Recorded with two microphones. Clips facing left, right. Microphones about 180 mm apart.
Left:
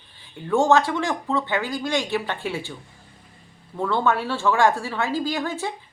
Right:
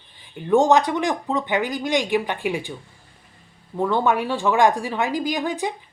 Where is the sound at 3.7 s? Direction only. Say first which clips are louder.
Right 2 dB; 15° right (ahead or behind).